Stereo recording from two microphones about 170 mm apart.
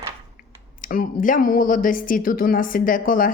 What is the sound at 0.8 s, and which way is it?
A woman's voice, 55° left (ahead or behind).